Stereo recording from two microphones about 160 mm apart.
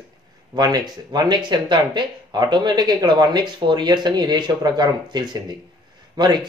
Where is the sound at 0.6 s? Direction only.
25° right (ahead or behind).